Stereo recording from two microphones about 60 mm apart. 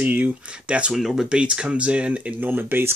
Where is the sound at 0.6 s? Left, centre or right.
Centre.